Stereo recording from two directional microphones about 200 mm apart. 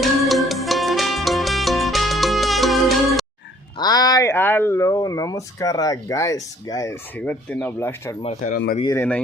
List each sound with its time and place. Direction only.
0.0 s music: centre (ahead or behind)
3.8 s speech: 20° left (ahead or behind)
7.3 s speech: 5° left (ahead or behind)
8.2 s speech: 35° left (ahead or behind)
8.9 s speech: 10° left (ahead or behind)